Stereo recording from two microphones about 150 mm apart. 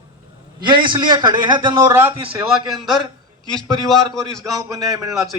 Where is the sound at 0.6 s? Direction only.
30° right (ahead or behind).